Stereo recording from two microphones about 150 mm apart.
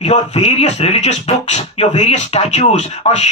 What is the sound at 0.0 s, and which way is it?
Speech, 50° left (ahead or behind).